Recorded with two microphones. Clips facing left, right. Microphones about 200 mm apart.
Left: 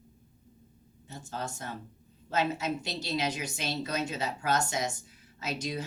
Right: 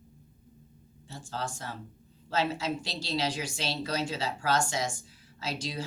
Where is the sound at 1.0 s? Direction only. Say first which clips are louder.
Right 1 dB; 20° left (ahead or behind).